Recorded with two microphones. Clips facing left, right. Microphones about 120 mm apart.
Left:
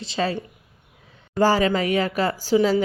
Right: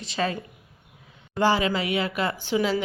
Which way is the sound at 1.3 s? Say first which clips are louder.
Left 4 dB; 40° left (ahead or behind).